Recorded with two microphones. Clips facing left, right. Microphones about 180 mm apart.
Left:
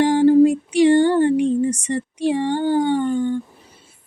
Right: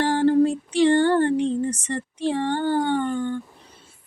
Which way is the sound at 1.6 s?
15° left (ahead or behind).